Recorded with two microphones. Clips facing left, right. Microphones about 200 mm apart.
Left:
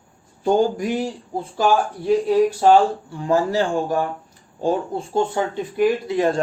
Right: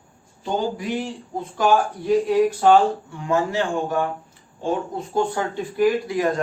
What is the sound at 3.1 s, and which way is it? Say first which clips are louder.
Speech: left 3 dB; 35° left (ahead or behind).